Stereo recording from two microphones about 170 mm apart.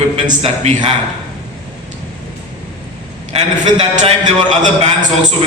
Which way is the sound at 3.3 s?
40° right (ahead or behind).